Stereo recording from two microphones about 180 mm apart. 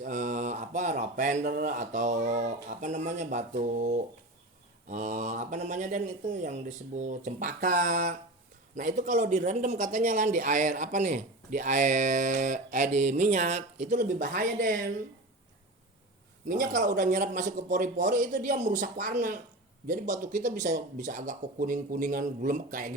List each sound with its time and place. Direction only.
0.0 s speech: 45° right (ahead or behind)
16.5 s speech: 45° right (ahead or behind)